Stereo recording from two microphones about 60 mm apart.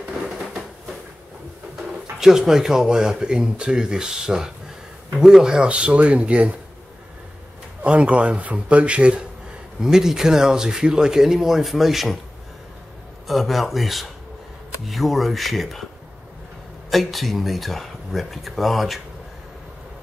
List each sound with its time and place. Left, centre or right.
2.1 s a man's voice: centre
7.8 s a man's voice: right; by 12.2 s centre
13.3 s speech: centre
16.9 s speech: centre